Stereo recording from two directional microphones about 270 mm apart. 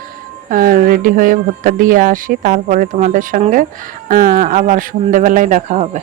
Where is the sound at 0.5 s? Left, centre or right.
Right.